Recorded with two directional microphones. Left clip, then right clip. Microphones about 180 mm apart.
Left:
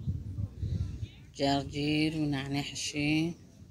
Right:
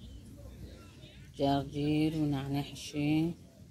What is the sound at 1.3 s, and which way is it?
Speech, 20° right (ahead or behind).